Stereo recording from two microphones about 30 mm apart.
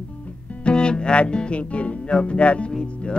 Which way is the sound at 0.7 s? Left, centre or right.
Left.